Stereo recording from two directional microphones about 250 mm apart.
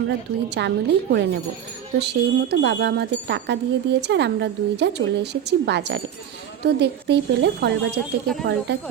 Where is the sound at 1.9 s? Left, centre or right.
Right.